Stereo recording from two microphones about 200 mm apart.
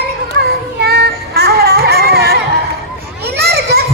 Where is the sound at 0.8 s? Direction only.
50° right (ahead or behind).